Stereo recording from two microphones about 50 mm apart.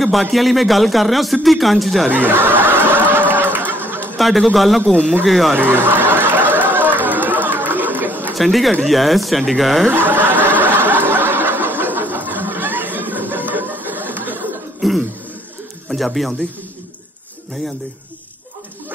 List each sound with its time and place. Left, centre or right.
0.3 s a man's voice: centre
2.1 s snicker: right
3.1 s a sound: right
4.2 s a man's voice: centre
5.7 s snicker: right
7.0 s chatter: right
8.4 s a man's voice: centre
9.8 s speech: right
10.3 s snicker: left
10.6 s snicker: right
14.8 s throat clearing: centre
15.9 s speech: centre